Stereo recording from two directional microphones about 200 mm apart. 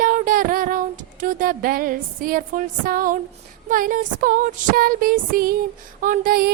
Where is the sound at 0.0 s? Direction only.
45° right (ahead or behind).